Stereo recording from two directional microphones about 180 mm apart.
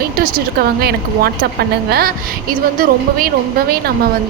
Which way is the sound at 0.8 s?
60° right (ahead or behind).